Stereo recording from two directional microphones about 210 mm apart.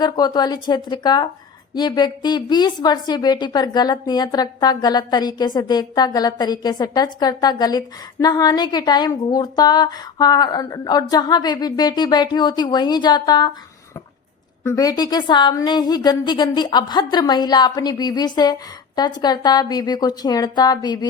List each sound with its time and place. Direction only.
0.0 s a woman's voice: 20° left (ahead or behind)
14.6 s a woman's voice: 15° left (ahead or behind)